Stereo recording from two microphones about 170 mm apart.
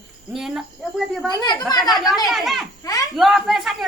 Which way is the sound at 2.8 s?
20° left (ahead or behind).